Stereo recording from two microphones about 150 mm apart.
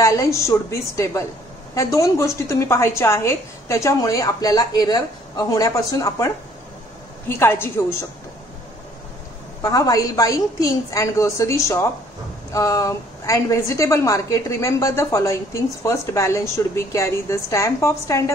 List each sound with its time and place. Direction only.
0.0 s a woman's voice: 20° left (ahead or behind)
9.6 s a woman's voice: 25° left (ahead or behind)